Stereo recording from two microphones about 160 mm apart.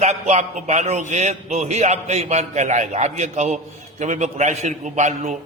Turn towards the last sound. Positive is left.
turn(degrees=-50)  # may be behind; listen again after turning